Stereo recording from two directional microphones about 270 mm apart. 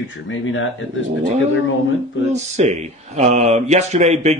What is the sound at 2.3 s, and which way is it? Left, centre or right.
Speech, right.